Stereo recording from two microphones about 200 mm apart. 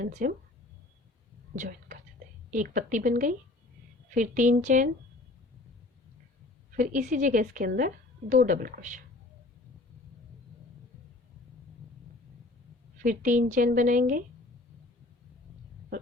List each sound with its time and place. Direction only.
0.0 s a woman's voice: 40° right (ahead or behind)
1.5 s a woman's voice: 45° right (ahead or behind)
6.7 s a woman's voice: 40° right (ahead or behind)
13.0 s a woman's voice: 40° right (ahead or behind)